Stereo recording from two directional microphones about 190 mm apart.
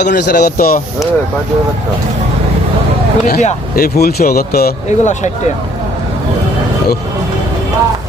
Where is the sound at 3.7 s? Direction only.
55° left (ahead or behind).